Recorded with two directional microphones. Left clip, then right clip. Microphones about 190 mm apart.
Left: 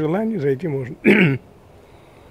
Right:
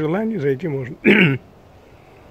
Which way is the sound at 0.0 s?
10° left (ahead or behind).